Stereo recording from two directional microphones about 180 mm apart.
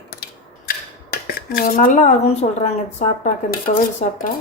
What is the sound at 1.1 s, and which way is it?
Cutlery, 55° left (ahead or behind).